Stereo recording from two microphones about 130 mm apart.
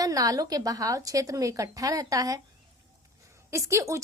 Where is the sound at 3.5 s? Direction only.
20° right (ahead or behind).